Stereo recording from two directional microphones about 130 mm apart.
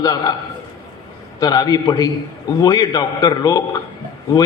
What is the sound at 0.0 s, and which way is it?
Speech, 30° left (ahead or behind).